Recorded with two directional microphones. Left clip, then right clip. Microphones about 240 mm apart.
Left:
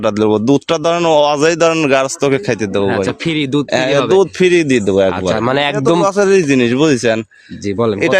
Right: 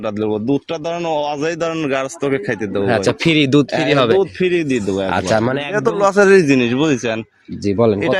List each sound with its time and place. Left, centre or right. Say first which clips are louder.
0.0 s speech: left 7 dB; left
2.9 s speech: right 2 dB; centre
4.2 s speech: left 5 dB; left
5.7 s a man's voice: left 1 dB; centre
6.5 s speech: left 3 dB; left
7.7 s a man's voice: right 1 dB; centre